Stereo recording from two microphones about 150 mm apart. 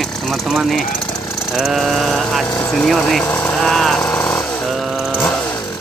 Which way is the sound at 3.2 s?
15° left (ahead or behind).